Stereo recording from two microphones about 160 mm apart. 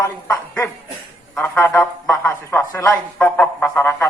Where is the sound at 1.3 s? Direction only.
10° left (ahead or behind).